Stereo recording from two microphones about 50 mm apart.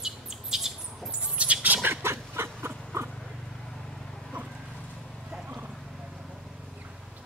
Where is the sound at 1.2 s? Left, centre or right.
Right.